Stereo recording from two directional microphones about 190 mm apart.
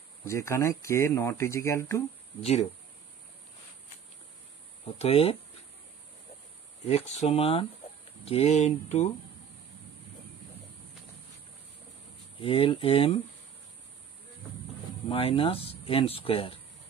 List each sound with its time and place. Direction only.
0.2 s speech: 15° left (ahead or behind)
4.8 s speech: 30° left (ahead or behind)
6.9 s speech: 35° left (ahead or behind)
12.4 s speech: 30° left (ahead or behind)
15.0 s speech: 30° left (ahead or behind)